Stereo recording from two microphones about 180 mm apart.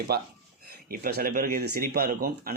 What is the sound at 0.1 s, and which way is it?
Speech, 60° right (ahead or behind).